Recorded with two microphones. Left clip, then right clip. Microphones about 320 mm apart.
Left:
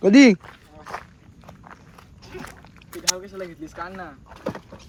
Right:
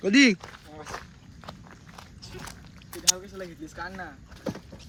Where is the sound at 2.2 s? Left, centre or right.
Centre.